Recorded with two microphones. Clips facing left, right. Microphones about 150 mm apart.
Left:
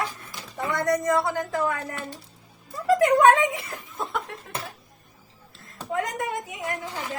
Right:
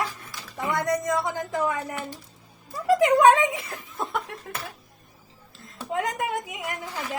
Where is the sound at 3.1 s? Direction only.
15° right (ahead or behind).